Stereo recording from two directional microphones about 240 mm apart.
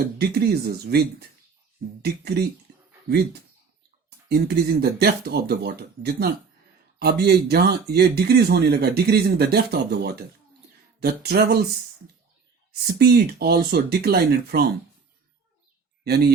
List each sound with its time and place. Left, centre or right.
0.2 s speech: right
4.3 s speech: right
12.8 s speech: right
16.0 s speech: right